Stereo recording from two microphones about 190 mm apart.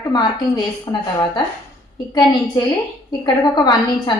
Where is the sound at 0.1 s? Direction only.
20° left (ahead or behind).